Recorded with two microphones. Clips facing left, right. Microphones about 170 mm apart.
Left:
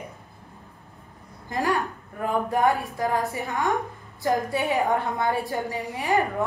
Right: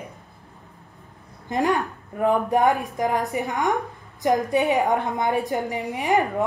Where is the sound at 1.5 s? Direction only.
20° right (ahead or behind).